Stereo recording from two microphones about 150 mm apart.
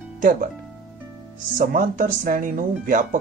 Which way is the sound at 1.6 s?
65° right (ahead or behind).